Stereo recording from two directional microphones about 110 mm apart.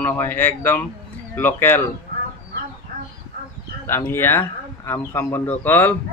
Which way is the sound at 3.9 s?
20° left (ahead or behind).